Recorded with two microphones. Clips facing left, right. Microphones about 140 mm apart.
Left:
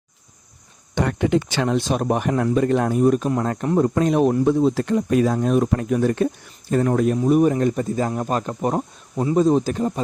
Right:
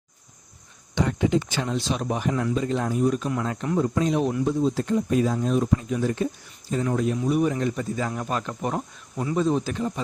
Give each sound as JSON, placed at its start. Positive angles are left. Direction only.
{"t": 0.9, "sound": "speech", "side_deg": 60}
{"t": 4.4, "sound": "speech", "side_deg": 65}